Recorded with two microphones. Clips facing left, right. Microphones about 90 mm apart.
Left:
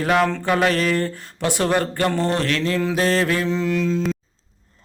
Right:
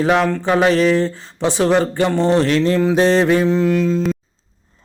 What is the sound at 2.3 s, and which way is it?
Mantra, 30° right (ahead or behind).